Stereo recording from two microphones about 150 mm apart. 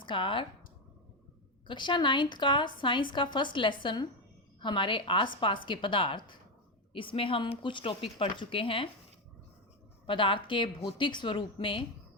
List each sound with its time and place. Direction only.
0.0 s speech: 35° left (ahead or behind)
1.6 s a woman's voice: 30° left (ahead or behind)
10.1 s a woman's voice: 35° left (ahead or behind)